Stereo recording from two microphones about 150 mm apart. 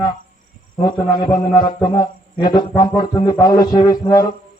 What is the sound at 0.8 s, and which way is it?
A man's voice, 30° left (ahead or behind).